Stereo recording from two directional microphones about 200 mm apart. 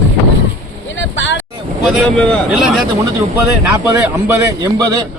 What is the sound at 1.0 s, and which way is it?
Vehicle, 65° left (ahead or behind).